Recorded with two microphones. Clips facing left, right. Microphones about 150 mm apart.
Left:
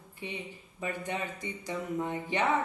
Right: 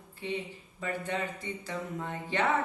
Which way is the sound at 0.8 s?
15° left (ahead or behind).